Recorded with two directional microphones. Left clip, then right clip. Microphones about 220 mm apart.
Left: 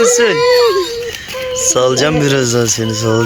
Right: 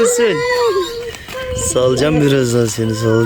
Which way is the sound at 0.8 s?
10° right (ahead or behind).